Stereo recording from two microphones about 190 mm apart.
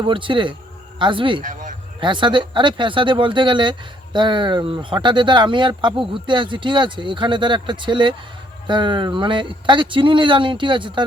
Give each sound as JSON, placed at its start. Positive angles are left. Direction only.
{"t": 0.0, "sound": "speech", "side_deg": -25}
{"t": 1.4, "sound": "a sound", "side_deg": -45}
{"t": 2.0, "sound": "speech", "side_deg": -25}